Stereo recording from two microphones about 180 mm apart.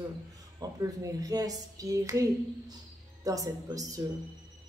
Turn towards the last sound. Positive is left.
turn(degrees=-20)  # may be behind; listen again after turning